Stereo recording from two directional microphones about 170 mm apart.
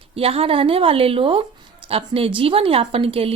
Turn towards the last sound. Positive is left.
turn(degrees=-35)  # may be behind; listen again after turning